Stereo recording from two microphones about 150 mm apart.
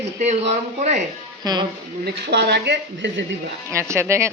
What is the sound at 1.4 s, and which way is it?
Speech, 30° right (ahead or behind).